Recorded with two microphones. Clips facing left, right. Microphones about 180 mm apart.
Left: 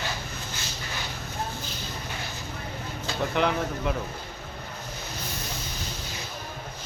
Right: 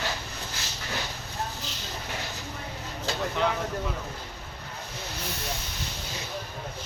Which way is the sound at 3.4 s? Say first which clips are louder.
Left 3 dB; 65° left (ahead or behind).